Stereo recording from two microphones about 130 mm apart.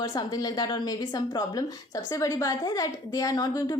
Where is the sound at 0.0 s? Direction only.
30° left (ahead or behind).